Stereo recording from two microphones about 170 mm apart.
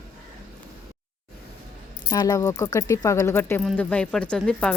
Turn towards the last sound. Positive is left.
turn(degrees=5)  # may be behind; listen again after turning